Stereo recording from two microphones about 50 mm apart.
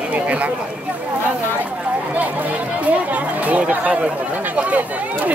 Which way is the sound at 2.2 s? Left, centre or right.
Right.